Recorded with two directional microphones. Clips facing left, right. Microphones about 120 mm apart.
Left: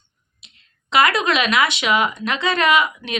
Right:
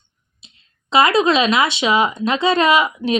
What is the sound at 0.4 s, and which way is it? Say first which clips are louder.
Speech: right 3 dB; 30° right (ahead or behind).